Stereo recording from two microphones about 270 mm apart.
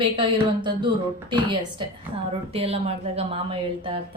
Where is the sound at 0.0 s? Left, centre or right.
Centre.